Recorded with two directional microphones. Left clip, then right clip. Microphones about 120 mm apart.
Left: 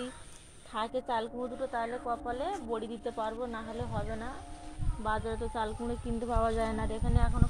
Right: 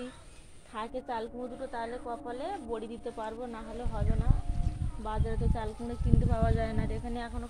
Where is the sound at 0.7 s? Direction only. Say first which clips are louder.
Left 3 dB; 45° left (ahead or behind).